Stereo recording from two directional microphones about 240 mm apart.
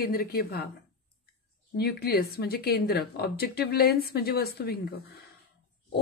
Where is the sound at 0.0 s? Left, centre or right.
Left.